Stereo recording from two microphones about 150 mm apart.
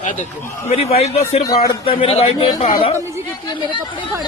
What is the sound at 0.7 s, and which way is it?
A man's voice, 40° left (ahead or behind).